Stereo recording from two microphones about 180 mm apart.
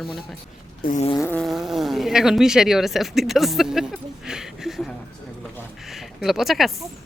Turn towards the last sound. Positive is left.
turn(degrees=0)  # may be behind; listen again after turning